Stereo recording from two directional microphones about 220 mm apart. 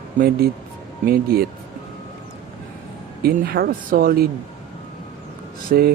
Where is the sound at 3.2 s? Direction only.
45° right (ahead or behind).